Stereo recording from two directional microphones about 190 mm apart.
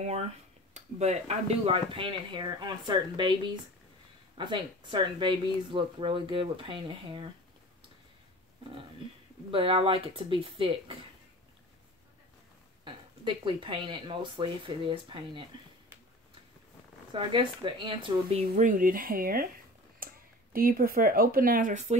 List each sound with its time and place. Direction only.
0.7 s speech: 35° right (ahead or behind)
4.4 s speech: 25° right (ahead or behind)
9.5 s speech: 30° right (ahead or behind)
12.8 s speech: 25° right (ahead or behind)
17.1 s speech: 25° right (ahead or behind)
18.5 s speech: 45° right (ahead or behind)